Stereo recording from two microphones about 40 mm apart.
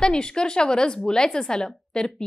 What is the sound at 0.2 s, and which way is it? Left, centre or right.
A woman's voice, centre.